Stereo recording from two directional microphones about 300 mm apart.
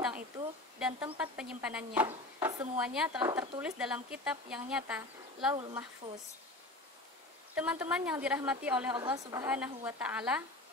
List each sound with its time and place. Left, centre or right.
0.7 s speech: centre
7.5 s speech: centre